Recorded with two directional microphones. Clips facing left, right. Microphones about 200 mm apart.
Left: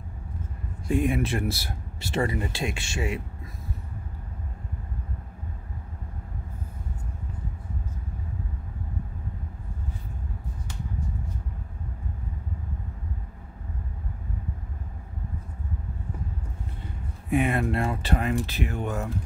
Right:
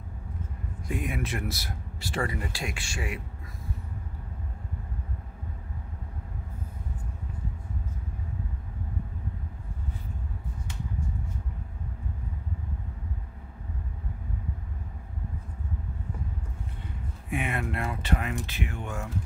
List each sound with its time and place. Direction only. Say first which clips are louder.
0.8 s speech: left 8 dB; 30° left (ahead or behind)
17.3 s speech: left 7 dB; 35° left (ahead or behind)